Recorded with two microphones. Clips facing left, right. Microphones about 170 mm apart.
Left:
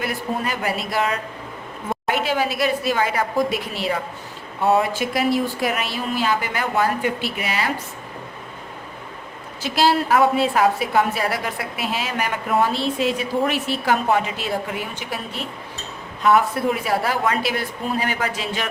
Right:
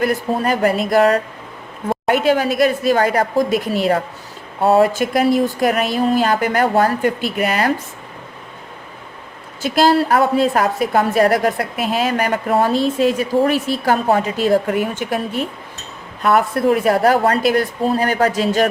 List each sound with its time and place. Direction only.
0.0 s a woman's voice: 45° right (ahead or behind)
9.6 s a woman's voice: 45° right (ahead or behind)